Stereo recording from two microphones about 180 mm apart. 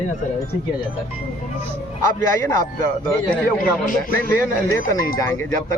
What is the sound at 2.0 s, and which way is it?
Speech, 15° left (ahead or behind).